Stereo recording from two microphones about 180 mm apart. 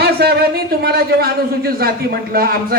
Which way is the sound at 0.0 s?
60° right (ahead or behind).